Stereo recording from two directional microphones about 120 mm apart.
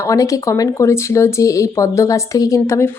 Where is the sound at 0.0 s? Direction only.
25° left (ahead or behind).